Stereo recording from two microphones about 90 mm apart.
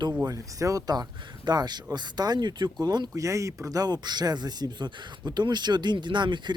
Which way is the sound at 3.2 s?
35° right (ahead or behind).